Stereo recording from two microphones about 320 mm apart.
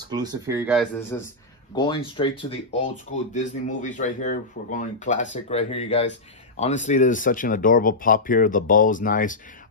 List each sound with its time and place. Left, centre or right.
0.1 s speech: centre
1.8 s speech: centre